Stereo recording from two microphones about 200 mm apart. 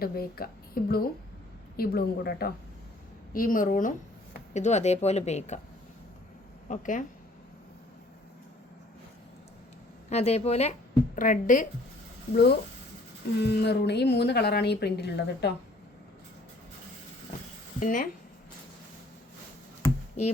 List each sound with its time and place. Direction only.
0.0 s a woman's voice: 50° left (ahead or behind)
6.7 s a woman's voice: 40° left (ahead or behind)
10.1 s a woman's voice: 35° left (ahead or behind)
12.3 s a woman's voice: 50° left (ahead or behind)
17.7 s a woman's voice: 40° left (ahead or behind)